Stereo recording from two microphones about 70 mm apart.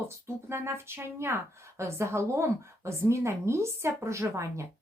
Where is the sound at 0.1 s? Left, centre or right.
Right.